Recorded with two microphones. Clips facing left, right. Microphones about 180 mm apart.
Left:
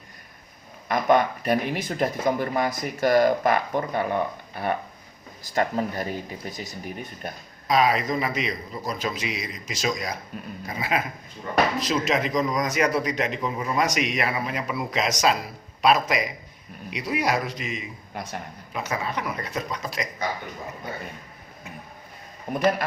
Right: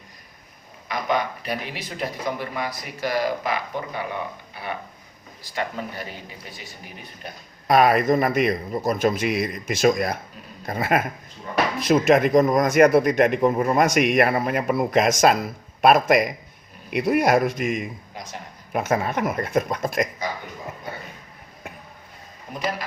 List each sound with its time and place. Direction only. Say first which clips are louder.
0.9 s speech: left 4 dB; 50° left (ahead or behind)
7.7 s a man's voice: right 5 dB; 55° right (ahead or behind)
18.1 s a man's voice: left 3 dB; 60° left (ahead or behind)
18.7 s a man's voice: right 6 dB; 50° right (ahead or behind)
22.5 s speech: left 7 dB; 45° left (ahead or behind)